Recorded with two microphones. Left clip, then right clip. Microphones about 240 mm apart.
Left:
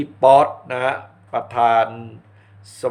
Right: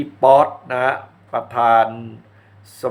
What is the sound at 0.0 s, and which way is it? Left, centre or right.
Speech, centre.